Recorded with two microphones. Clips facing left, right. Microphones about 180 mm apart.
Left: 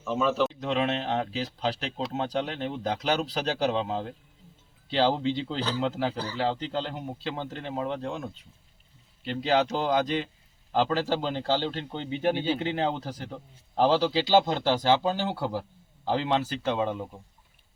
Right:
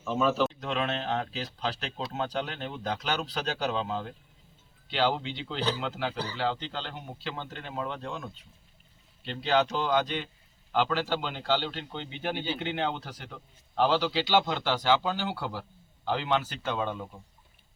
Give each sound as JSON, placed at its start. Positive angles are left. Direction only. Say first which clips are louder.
{"t": 0.0, "sound": "speech", "louder": "left 1 dB", "side_deg": 0}
{"t": 0.6, "sound": "a man's voice", "louder": "left 4 dB", "side_deg": 30}
{"t": 9.5, "sound": "a man's voice", "louder": "left 1 dB", "side_deg": 30}